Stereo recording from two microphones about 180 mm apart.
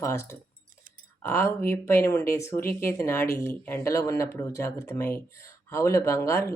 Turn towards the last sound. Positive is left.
turn(degrees=15)  # may be behind; listen again after turning